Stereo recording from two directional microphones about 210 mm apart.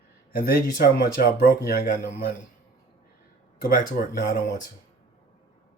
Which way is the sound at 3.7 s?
45° left (ahead or behind).